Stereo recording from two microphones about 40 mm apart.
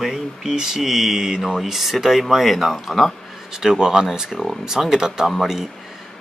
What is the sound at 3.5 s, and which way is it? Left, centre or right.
Speech, centre.